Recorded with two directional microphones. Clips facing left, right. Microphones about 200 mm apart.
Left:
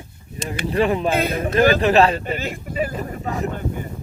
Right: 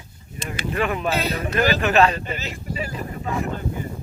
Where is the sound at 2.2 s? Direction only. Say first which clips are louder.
Left 5 dB; 50° left (ahead or behind).